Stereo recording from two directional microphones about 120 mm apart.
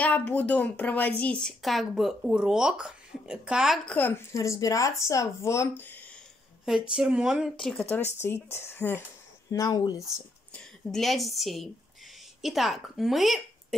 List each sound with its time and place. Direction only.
0.0 s speech: 10° left (ahead or behind); by 3.8 s 5° right (ahead or behind)
3.8 s a woman's voice: 10° left (ahead or behind)
4.3 s speech: 25° left (ahead or behind)
6.6 s speech: 5° right (ahead or behind)
8.2 s speech: 20° left (ahead or behind)
10.5 s a woman's voice: 5° left (ahead or behind)